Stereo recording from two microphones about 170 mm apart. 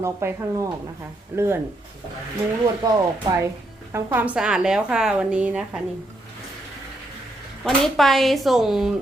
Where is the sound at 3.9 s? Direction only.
10° right (ahead or behind).